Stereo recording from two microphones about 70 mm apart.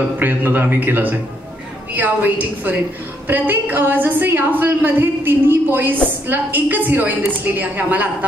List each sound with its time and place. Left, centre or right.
0.2 s a woman's voice: right